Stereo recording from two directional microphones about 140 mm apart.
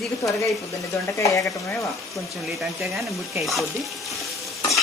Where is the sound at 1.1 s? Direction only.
25° left (ahead or behind).